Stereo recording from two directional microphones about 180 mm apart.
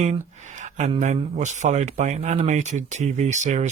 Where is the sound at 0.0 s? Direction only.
40° right (ahead or behind).